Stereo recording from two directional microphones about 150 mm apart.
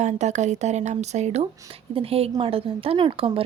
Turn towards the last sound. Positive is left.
turn(degrees=-35)  # may be behind; listen again after turning